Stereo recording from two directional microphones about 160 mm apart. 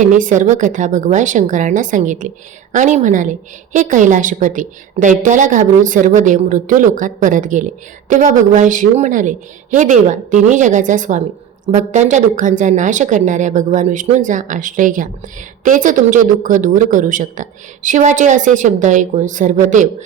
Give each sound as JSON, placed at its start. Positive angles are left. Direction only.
{"t": 0.0, "sound": "a woman's voice", "side_deg": -55}